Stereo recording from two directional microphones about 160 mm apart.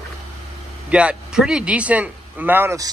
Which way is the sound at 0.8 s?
5° right (ahead or behind).